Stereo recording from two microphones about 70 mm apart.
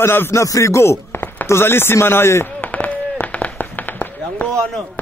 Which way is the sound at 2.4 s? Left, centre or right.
Left.